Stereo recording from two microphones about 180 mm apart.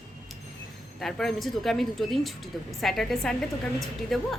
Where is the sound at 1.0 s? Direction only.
Centre (ahead or behind).